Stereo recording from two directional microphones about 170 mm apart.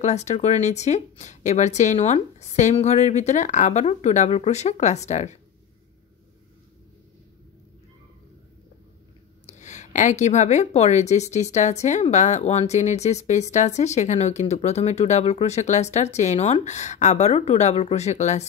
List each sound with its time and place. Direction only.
0.0 s speech: 40° left (ahead or behind)
9.5 s a woman's voice: 45° left (ahead or behind)